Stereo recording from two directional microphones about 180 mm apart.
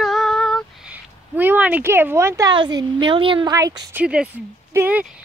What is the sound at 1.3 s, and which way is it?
A woman's voice, 10° right (ahead or behind).